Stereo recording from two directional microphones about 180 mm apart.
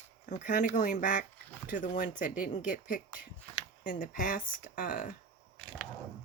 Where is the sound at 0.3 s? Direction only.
45° left (ahead or behind).